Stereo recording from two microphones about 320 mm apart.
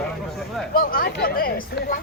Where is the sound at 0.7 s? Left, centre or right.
Left.